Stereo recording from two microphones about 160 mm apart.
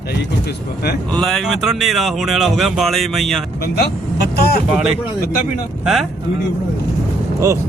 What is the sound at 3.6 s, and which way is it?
Speech, 75° left (ahead or behind).